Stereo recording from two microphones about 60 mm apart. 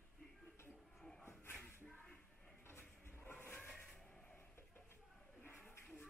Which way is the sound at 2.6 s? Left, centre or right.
Left.